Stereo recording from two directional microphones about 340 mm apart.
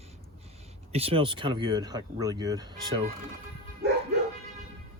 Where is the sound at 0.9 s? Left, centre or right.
Centre.